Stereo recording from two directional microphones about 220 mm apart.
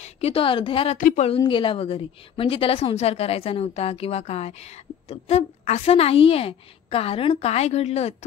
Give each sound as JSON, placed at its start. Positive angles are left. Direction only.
{"t": 0.0, "sound": "a woman's voice", "side_deg": 25}
{"t": 0.9, "sound": "a woman's voice", "side_deg": 35}